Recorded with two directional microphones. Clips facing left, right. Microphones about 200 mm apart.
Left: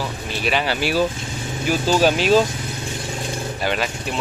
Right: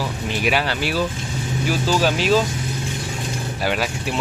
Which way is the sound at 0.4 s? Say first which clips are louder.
Right 1 dB; 10° right (ahead or behind).